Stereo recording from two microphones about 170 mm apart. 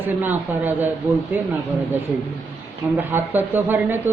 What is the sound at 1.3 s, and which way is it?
Speech, 10° right (ahead or behind).